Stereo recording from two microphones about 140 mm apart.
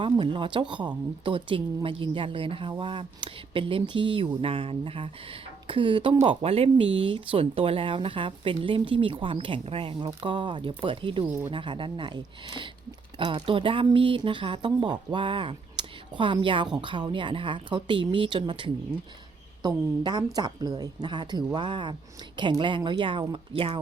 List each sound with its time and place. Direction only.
0.0 s speech: 35° right (ahead or behind)